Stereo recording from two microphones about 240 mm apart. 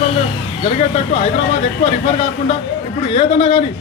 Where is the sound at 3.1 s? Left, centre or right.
Left.